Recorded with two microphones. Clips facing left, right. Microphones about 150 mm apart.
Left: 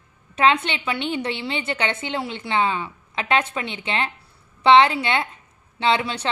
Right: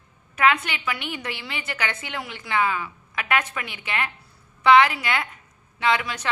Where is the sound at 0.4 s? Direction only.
25° left (ahead or behind).